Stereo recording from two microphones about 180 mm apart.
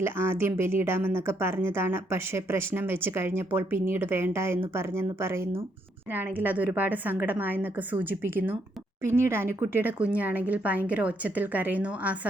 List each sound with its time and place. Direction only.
0.0 s speech: 15° right (ahead or behind)